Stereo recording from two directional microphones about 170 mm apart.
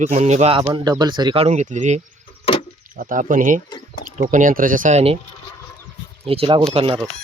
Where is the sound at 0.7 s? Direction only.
25° right (ahead or behind); by 5.2 s 40° right (ahead or behind).